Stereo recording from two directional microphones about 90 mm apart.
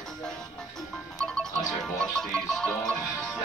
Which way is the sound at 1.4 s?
5° left (ahead or behind).